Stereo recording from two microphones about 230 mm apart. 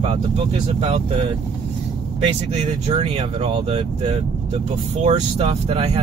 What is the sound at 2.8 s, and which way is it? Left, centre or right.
Speech, right.